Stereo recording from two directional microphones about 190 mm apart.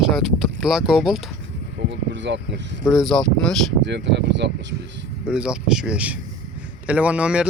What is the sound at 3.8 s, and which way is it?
Speech, 70° right (ahead or behind).